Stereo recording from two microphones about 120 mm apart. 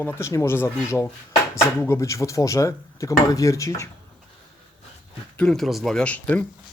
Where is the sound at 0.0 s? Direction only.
20° left (ahead or behind).